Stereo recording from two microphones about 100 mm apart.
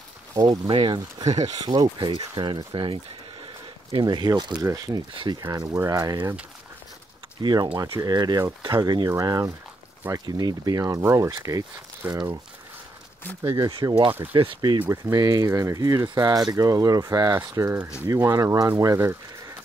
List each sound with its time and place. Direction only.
0.3 s speech: 40° right (ahead or behind)
0.7 s speech: 55° right (ahead or behind)
1.5 s speech: 40° right (ahead or behind)
2.0 s speech: 55° right (ahead or behind)
4.0 s speech: 45° right (ahead or behind)
4.6 s speech: 35° right (ahead or behind)
5.1 s speech: 50° right (ahead or behind)
5.6 s speech: 35° right (ahead or behind)
7.4 s speech: 45° right (ahead or behind)
13.4 s speech: 40° right (ahead or behind)
14.3 s speech: 60° right (ahead or behind)
14.9 s speech: 30° right (ahead or behind)
17.3 s speech: 25° right (ahead or behind)